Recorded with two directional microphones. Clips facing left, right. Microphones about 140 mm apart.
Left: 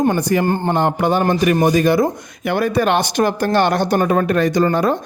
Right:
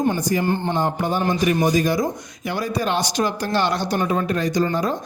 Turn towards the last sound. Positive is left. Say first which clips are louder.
# left 5 dB
turn(degrees=65)  # may be behind; listen again after turning